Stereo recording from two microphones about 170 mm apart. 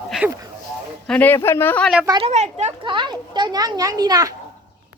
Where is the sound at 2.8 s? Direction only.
30° right (ahead or behind).